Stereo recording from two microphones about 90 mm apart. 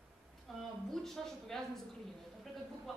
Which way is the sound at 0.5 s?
Centre (ahead or behind).